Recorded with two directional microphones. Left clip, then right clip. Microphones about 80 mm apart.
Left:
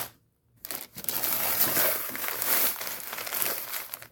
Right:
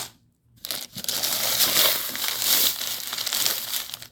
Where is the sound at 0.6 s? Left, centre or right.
Centre.